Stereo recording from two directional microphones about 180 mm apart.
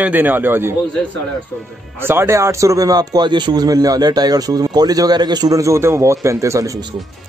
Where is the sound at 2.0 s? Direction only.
15° right (ahead or behind).